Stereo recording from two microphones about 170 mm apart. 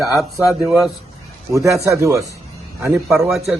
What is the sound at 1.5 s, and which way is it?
Speech, 20° right (ahead or behind).